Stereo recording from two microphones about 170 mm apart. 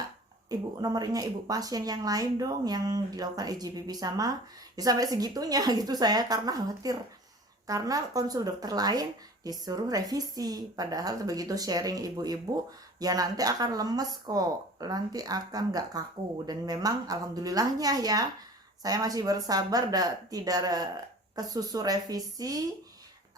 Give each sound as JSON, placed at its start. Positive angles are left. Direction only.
{"t": 0.8, "sound": "speech", "side_deg": -20}